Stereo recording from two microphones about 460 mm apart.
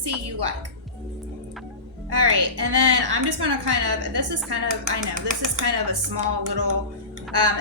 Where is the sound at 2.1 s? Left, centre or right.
Right.